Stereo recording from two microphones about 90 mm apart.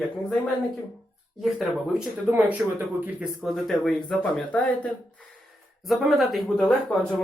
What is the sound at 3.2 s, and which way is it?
Speech, centre (ahead or behind).